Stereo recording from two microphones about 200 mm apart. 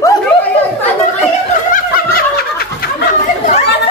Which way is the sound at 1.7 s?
45° left (ahead or behind).